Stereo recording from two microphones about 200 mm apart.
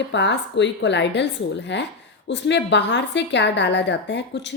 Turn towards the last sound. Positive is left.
turn(degrees=60)  # may be behind; listen again after turning